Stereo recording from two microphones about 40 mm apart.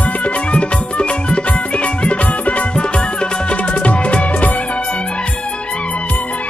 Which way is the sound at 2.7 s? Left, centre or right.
Left.